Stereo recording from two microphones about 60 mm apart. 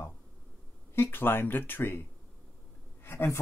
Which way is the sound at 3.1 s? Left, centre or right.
Left.